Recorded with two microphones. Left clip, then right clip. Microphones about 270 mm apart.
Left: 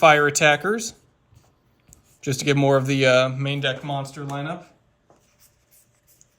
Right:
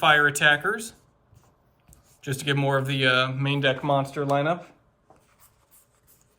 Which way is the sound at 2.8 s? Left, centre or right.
Centre.